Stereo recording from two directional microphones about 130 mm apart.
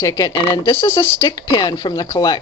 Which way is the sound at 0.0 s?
20° left (ahead or behind).